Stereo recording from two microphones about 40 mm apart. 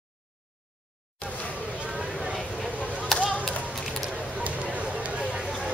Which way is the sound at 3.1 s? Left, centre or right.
Centre.